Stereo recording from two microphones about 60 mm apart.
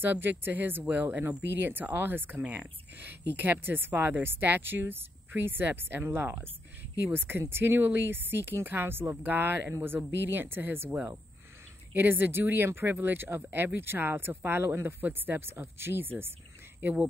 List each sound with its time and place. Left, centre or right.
0.0 s speech: right